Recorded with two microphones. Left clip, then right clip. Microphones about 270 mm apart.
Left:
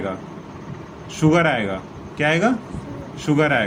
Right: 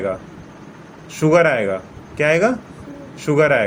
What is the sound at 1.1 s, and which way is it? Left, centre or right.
Speech, centre.